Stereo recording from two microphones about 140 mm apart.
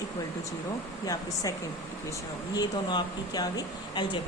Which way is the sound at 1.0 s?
25° left (ahead or behind).